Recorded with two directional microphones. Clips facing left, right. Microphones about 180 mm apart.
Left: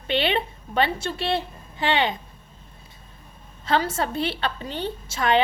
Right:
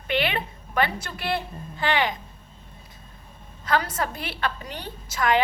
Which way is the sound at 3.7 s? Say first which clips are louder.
Left 2 dB; 25° left (ahead or behind).